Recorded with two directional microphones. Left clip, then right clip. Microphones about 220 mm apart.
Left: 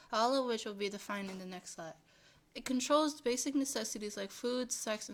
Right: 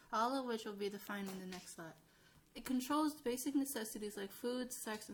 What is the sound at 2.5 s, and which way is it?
Speech, 15° left (ahead or behind).